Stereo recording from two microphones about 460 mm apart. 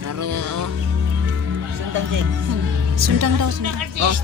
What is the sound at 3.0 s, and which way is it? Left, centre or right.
Speech, right.